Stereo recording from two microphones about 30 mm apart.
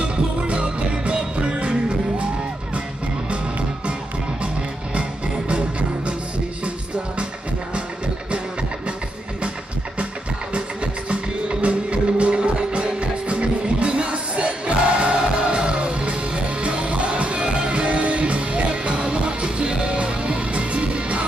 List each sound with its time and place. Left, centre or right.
0.0 s music: right
5.5 s music: right
11.1 s music: right